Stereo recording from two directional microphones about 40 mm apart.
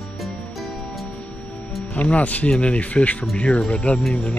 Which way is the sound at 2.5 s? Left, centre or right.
Left.